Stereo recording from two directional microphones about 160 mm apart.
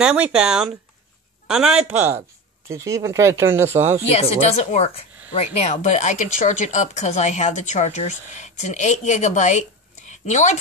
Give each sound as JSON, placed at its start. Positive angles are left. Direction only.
{"t": 0.0, "sound": "speech", "side_deg": -5}
{"t": 4.1, "sound": "a woman's voice", "side_deg": 40}